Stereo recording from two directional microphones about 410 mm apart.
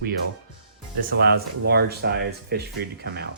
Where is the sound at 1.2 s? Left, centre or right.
Right.